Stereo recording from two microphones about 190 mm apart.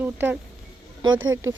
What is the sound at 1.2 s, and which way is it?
Speech, 90° right.